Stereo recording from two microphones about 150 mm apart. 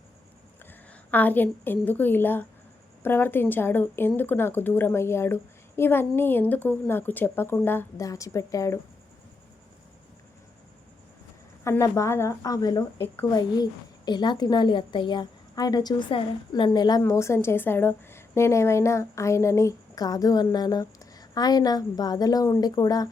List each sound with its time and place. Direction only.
0.7 s a woman's voice: 10° left (ahead or behind)
11.6 s a woman's voice: 20° left (ahead or behind)